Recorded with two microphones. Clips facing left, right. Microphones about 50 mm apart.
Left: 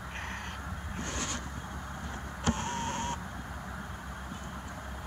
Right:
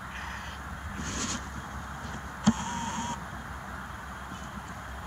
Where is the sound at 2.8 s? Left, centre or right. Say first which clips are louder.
Right 1 dB; left.